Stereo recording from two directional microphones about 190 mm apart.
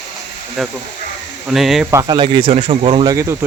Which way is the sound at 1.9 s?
25° right (ahead or behind).